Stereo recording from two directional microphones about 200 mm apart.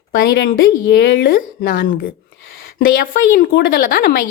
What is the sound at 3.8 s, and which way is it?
Speech, 45° left (ahead or behind).